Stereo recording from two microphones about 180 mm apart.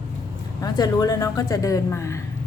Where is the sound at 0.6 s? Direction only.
20° left (ahead or behind).